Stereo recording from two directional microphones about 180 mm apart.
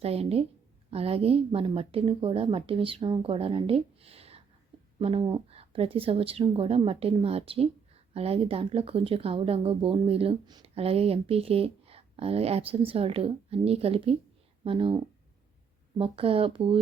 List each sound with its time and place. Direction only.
0.0 s speech: 35° right (ahead or behind)